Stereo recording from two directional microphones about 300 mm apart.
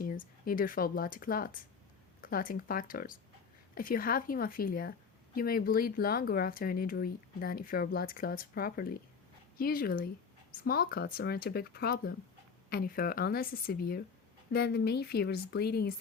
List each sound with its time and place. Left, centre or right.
0.0 s a woman's voice: left